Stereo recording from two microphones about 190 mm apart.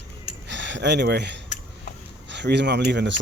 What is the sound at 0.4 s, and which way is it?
Speech, 70° right (ahead or behind).